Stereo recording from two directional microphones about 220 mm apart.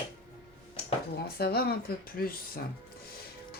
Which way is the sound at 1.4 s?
45° left (ahead or behind).